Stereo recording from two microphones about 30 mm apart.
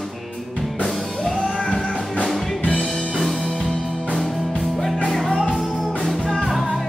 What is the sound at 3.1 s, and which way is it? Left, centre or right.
Music, centre.